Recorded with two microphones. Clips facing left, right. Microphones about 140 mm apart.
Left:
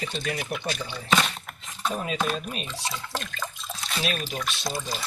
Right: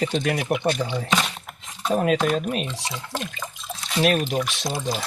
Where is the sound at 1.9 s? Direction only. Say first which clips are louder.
Right 12 dB; 70° right (ahead or behind).